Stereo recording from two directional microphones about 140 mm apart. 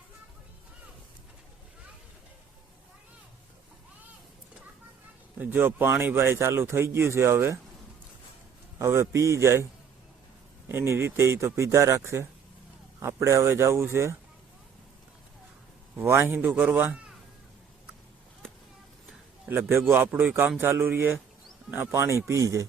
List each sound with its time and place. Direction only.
5.4 s speech: 10° right (ahead or behind)
8.8 s speech: 20° right (ahead or behind)
10.7 s speech: 15° right (ahead or behind)
16.0 s speech: 15° right (ahead or behind)
19.5 s speech: 15° right (ahead or behind)